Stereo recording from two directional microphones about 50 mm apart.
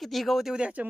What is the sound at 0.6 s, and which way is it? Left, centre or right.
Speech, right.